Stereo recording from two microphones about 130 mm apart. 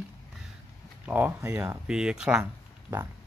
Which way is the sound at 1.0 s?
15° right (ahead or behind).